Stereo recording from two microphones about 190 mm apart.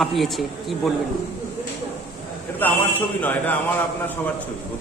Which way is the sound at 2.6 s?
10° left (ahead or behind).